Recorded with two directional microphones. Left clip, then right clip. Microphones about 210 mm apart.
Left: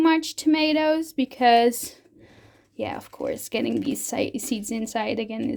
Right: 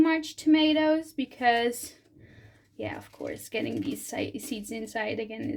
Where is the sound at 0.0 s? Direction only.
50° left (ahead or behind).